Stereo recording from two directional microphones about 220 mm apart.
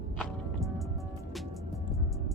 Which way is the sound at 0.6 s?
Centre (ahead or behind).